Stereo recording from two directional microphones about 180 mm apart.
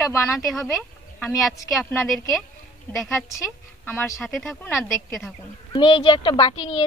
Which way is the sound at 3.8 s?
10° left (ahead or behind).